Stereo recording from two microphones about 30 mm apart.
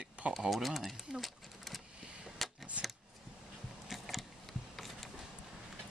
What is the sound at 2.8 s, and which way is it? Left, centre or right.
Scissors, right.